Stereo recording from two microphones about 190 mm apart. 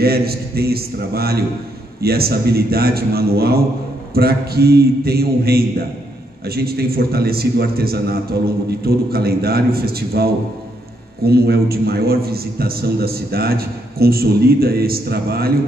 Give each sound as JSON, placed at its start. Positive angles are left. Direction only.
{"t": 0.0, "sound": "a man's voice", "side_deg": -55}